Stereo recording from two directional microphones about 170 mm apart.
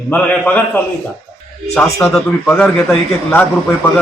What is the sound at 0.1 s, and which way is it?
A man's voice, 10° left (ahead or behind).